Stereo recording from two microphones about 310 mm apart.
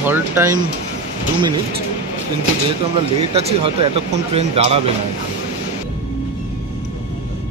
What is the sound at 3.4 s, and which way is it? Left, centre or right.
Speech, centre.